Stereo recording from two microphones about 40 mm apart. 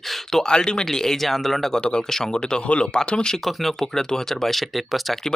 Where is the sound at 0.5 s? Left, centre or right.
Left.